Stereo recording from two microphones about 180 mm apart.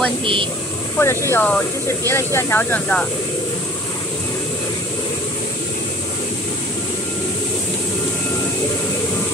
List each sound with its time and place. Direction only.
0.2 s a woman's voice: 30° right (ahead or behind)
0.9 s speech: 15° left (ahead or behind)